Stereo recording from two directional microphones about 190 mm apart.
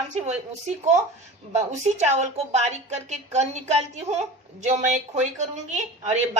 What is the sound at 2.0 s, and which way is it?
A woman's voice, 35° right (ahead or behind).